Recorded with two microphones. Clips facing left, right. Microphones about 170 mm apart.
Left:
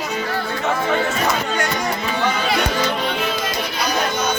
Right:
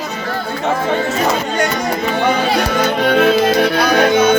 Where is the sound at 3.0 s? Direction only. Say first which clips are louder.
Right 11 dB; 60° right (ahead or behind).